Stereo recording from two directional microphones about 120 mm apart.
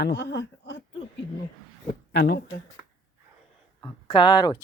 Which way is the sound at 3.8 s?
40° left (ahead or behind).